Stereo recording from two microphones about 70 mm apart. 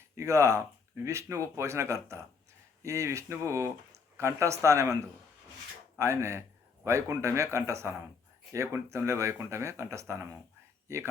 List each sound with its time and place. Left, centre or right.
0.2 s speech: right
6.0 s speech: right